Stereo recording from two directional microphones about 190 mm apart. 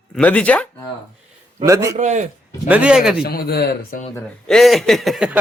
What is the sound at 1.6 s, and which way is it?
Speech, 15° right (ahead or behind).